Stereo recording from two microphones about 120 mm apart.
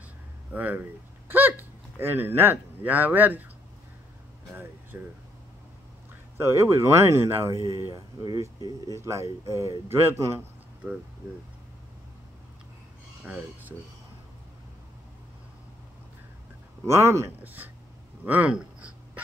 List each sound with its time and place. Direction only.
0.5 s speech: 15° right (ahead or behind)
4.9 s speech: 20° right (ahead or behind)
6.3 s speech: 20° right (ahead or behind)
13.2 s speech: 15° right (ahead or behind)
16.8 s speech: 25° right (ahead or behind)
18.2 s a sound: 15° right (ahead or behind)